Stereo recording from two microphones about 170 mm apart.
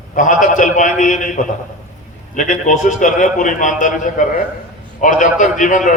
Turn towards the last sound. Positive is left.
turn(degrees=50)  # may be behind; listen again after turning